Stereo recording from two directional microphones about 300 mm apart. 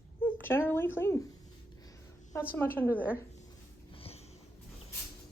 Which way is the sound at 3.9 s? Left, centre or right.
Centre.